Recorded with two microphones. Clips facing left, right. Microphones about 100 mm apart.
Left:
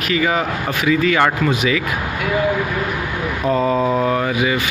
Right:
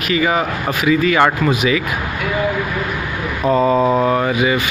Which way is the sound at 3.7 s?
45° right (ahead or behind).